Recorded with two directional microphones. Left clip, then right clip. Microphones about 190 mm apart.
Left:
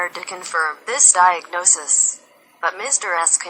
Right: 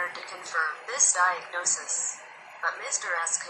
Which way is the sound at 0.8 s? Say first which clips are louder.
Left 12 dB; 45° left (ahead or behind).